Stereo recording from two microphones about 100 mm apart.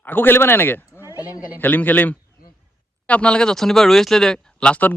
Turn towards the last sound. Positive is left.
turn(degrees=15)  # may be behind; listen again after turning